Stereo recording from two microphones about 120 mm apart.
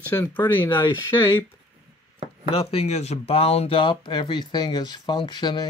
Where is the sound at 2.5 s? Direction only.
55° left (ahead or behind); by 5.7 s 35° left (ahead or behind).